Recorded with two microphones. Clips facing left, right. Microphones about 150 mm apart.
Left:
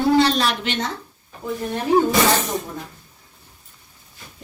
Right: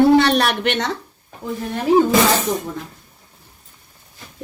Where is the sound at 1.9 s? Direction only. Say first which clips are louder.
Right 3 dB; 90° right.